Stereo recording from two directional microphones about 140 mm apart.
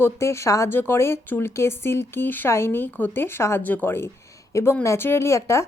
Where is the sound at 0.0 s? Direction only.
20° left (ahead or behind).